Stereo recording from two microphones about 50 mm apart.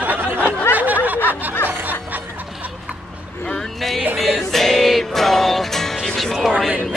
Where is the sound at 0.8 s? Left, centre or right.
Right.